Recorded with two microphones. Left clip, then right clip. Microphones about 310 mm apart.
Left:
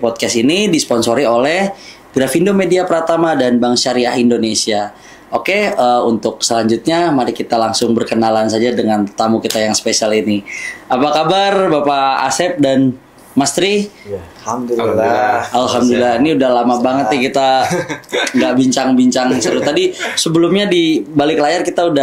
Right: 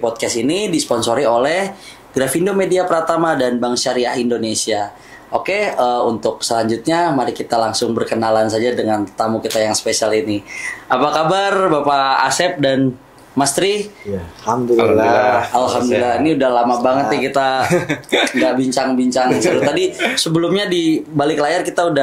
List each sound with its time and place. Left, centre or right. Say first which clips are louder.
0.0 s speech: left 4 dB; left
15.5 s speech: left 2 dB; left